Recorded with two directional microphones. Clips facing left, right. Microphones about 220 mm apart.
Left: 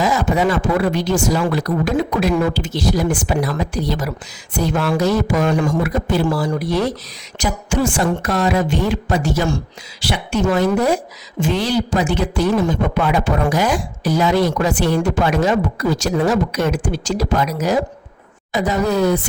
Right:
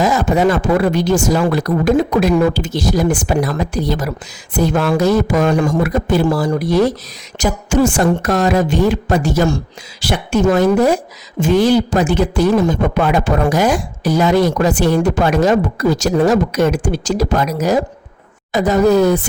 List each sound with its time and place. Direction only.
0.0 s speech: 45° right (ahead or behind)